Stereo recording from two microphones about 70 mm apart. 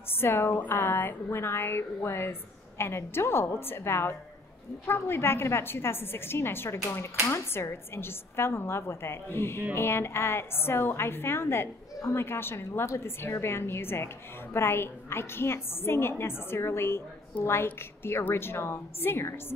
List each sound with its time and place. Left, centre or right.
0.1 s a woman's voice: left